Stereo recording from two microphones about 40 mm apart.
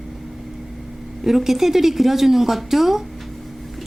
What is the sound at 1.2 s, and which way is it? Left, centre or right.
A woman's voice, centre.